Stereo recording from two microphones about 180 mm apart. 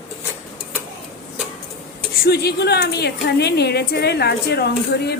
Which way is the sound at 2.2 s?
65° left (ahead or behind).